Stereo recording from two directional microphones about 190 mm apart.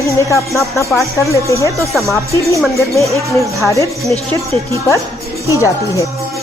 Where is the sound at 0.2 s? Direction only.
15° left (ahead or behind).